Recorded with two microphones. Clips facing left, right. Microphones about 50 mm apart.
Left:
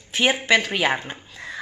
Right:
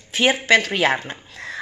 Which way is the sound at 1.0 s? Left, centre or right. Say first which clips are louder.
Right 2 dB; centre.